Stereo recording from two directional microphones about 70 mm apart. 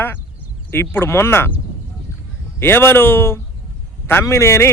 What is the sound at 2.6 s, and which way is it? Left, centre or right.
A man's voice, left.